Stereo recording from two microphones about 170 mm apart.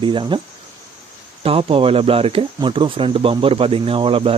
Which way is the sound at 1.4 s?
35° right (ahead or behind).